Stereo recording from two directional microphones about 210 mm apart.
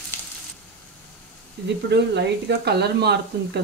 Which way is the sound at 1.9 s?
55° right (ahead or behind).